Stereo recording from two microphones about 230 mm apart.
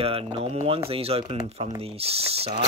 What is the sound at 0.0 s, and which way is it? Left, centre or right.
Speech, right.